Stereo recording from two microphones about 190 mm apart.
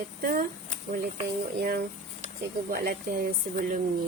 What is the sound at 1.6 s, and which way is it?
Speech, 55° right (ahead or behind).